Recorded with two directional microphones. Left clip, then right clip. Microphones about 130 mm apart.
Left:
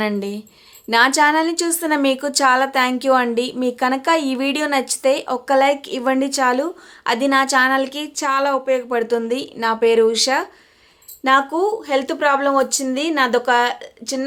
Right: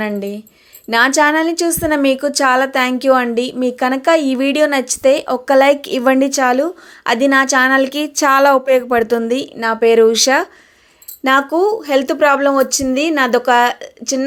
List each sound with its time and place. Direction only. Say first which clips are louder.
0.2 s speech: right 3 dB; 10° right (ahead or behind)
0.9 s a woman's voice: right 2 dB; 20° right (ahead or behind)